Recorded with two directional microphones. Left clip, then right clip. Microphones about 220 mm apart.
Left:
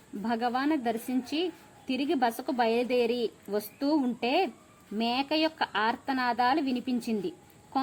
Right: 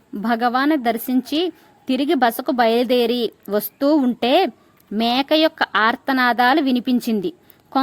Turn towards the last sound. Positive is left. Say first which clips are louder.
# right 11 dB
turn(degrees=-45)  # may be behind; listen again after turning